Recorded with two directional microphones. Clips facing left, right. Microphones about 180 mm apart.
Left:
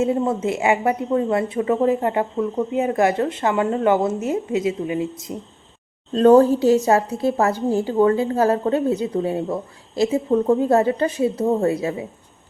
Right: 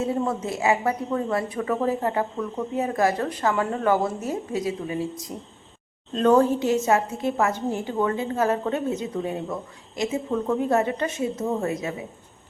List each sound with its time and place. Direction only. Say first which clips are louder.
0.0 s speech: left 5 dB; 25° left (ahead or behind)
6.1 s a woman's voice: left 6 dB; 35° left (ahead or behind)